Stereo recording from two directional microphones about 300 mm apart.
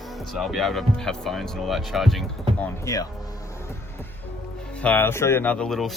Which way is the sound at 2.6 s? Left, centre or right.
Centre.